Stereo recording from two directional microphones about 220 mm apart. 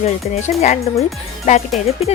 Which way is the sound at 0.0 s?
30° left (ahead or behind).